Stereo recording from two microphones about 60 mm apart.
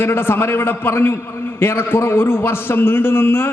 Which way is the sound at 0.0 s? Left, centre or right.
Left.